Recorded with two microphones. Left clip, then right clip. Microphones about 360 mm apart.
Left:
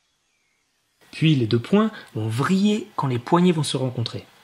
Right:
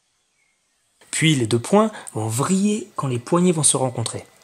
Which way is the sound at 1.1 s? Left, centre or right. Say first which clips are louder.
Right 2 dB; right.